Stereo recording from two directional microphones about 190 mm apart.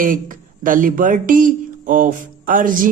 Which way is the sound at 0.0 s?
45° right (ahead or behind).